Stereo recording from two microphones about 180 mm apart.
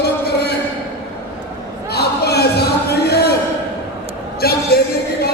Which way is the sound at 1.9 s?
60° left (ahead or behind).